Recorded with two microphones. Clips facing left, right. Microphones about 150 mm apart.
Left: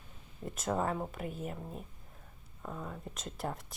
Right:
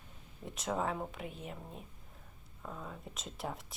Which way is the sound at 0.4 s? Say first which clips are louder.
Left 2 dB; centre (ahead or behind).